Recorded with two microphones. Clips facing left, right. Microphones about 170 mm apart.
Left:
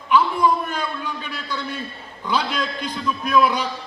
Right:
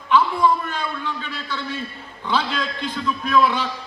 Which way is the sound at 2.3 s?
15° left (ahead or behind).